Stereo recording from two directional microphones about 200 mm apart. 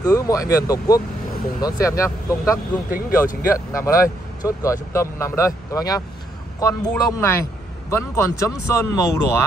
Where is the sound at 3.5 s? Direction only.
15° left (ahead or behind).